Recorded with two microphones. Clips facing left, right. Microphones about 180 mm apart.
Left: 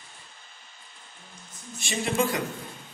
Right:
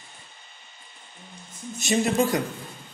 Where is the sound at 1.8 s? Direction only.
40° right (ahead or behind).